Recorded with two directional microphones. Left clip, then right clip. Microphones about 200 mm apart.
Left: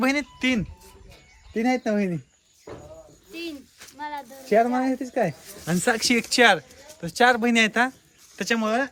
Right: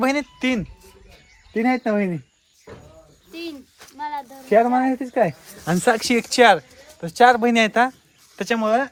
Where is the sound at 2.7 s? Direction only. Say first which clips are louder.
Left 1 dB; 40° left (ahead or behind).